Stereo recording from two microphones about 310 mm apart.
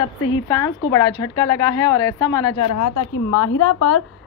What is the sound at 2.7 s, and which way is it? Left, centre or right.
A woman's voice, left.